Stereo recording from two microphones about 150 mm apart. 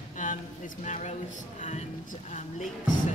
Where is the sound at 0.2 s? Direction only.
55° left (ahead or behind).